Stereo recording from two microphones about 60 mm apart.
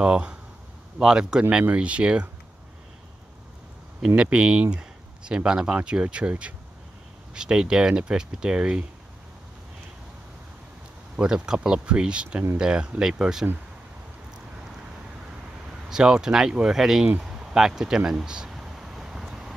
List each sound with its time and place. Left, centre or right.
0.0 s speech: centre
4.0 s speech: centre
11.1 s speech: centre
15.9 s speech: centre
17.2 s a sound: centre